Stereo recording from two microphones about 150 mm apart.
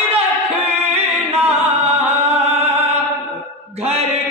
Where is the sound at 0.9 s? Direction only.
40° right (ahead or behind).